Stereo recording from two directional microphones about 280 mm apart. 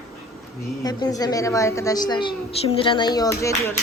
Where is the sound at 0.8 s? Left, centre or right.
Centre.